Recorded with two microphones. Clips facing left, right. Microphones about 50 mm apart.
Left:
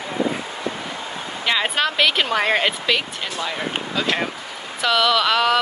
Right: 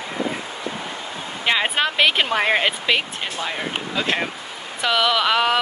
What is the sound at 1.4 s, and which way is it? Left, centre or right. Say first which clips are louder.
Speech: right 1 dB; centre.